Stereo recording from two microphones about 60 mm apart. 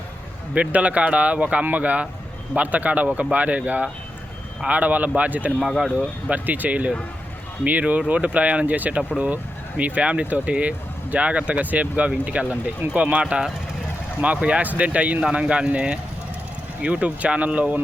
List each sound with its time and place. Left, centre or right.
0.5 s speech: right
5.5 s speech: centre
6.3 s speech: right
14.4 s speech: right